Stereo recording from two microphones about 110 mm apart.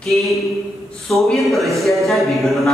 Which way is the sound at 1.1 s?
Centre (ahead or behind).